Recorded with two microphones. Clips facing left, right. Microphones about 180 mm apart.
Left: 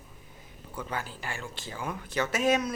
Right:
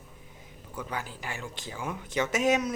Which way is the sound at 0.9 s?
15° right (ahead or behind).